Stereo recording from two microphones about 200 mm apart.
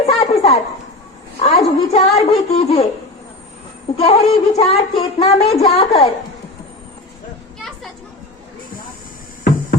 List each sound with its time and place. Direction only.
0.0 s a sound: 30° left (ahead or behind)
1.4 s speech: 30° left (ahead or behind)
3.9 s speech: 30° left (ahead or behind)